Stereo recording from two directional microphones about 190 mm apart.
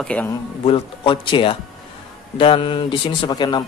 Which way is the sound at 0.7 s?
25° left (ahead or behind).